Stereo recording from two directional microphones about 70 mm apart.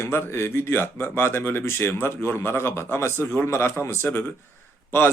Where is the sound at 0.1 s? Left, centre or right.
Left.